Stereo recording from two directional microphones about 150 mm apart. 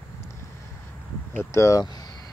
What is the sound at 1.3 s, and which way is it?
Speech, 20° left (ahead or behind).